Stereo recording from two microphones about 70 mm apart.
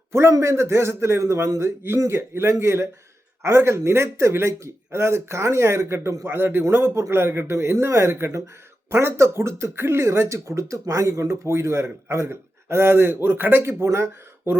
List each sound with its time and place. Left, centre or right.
0.1 s a man's voice: right
6.2 s speech: right